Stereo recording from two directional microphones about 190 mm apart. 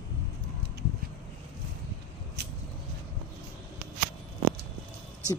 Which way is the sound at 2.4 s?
55° right (ahead or behind).